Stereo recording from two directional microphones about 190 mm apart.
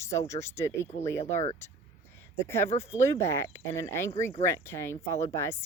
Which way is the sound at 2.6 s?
35° left (ahead or behind).